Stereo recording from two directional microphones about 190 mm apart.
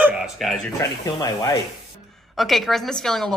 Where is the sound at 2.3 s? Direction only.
Centre (ahead or behind).